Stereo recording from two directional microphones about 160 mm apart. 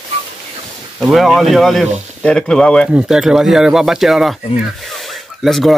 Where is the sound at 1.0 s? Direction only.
Centre (ahead or behind).